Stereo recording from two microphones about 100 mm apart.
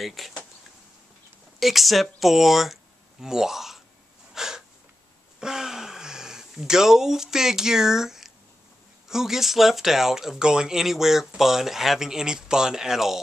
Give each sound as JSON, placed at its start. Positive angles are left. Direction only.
{"t": 0.0, "sound": "speech", "side_deg": 0}
{"t": 1.6, "sound": "speech", "side_deg": 0}
{"t": 4.3, "sound": "a sound", "side_deg": -5}
{"t": 9.1, "sound": "speech", "side_deg": -5}